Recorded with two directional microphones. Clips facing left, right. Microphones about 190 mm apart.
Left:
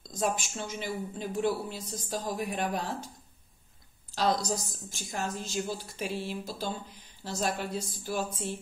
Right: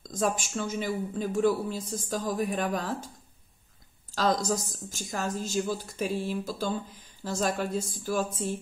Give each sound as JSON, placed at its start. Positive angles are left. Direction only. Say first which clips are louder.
{"t": 0.0, "sound": "speech", "louder": "right 2 dB", "side_deg": -45}
{"t": 4.1, "sound": "speech", "louder": "right 2 dB", "side_deg": -45}